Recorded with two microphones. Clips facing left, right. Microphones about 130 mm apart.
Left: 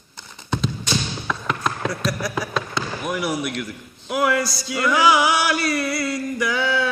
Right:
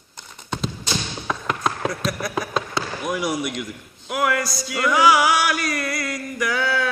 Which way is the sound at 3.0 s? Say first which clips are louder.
Even; 15° right (ahead or behind).